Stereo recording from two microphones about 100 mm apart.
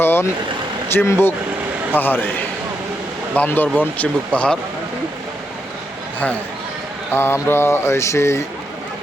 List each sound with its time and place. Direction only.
0.0 s vehicle: 20° left (ahead or behind)
0.9 s mantra: 25° left (ahead or behind)
3.3 s speech: 20° left (ahead or behind)
7.1 s mantra: 25° left (ahead or behind)